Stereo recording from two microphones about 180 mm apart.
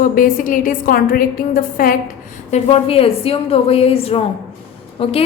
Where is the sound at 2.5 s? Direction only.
30° left (ahead or behind).